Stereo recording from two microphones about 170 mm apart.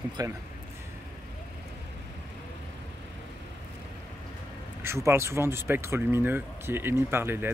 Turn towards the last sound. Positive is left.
turn(degrees=-15)  # may be behind; listen again after turning